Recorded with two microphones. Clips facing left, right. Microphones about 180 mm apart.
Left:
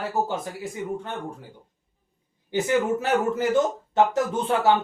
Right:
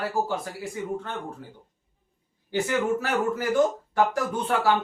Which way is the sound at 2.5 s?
20° left (ahead or behind).